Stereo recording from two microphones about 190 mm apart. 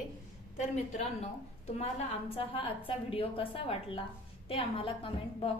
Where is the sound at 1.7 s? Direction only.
30° left (ahead or behind).